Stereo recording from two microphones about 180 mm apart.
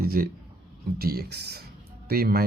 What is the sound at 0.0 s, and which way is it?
Speech, 55° right (ahead or behind).